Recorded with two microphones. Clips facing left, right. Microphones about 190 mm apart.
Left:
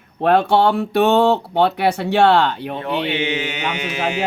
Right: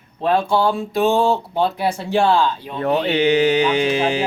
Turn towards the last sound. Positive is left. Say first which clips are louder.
# right 6 dB
turn(degrees=-30)  # may be behind; listen again after turning